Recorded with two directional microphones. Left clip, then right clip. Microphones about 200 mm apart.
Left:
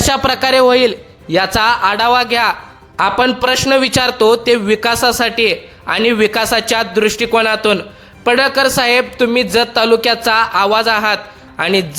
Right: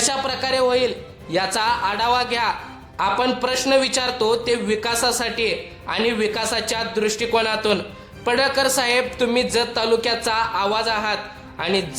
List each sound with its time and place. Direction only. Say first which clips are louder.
0.0 s a man's voice: left 9 dB; 30° left (ahead or behind)